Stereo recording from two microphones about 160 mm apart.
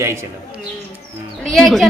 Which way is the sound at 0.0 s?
15° right (ahead or behind).